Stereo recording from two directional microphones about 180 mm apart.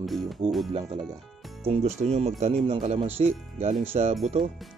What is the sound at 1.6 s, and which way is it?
Speech, 35° right (ahead or behind).